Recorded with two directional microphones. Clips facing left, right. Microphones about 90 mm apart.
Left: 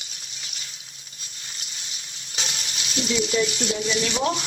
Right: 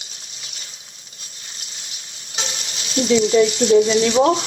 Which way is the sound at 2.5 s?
35° right (ahead or behind).